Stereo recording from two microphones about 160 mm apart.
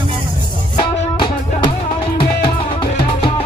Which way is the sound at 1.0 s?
30° left (ahead or behind).